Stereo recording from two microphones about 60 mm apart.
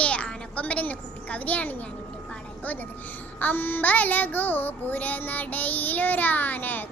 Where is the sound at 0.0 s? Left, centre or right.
Left.